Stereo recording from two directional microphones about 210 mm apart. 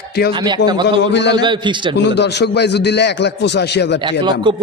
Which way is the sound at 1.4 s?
20° right (ahead or behind).